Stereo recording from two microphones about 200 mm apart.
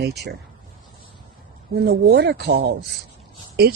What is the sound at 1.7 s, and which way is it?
Speech, 50° right (ahead or behind).